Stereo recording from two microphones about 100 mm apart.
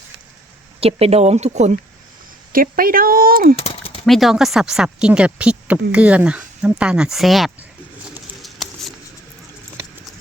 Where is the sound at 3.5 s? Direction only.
80° left.